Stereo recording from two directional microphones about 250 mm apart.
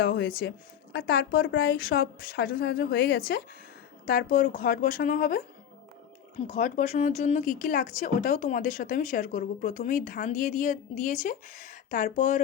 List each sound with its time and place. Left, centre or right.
0.0 s speech: left
6.5 s speech: left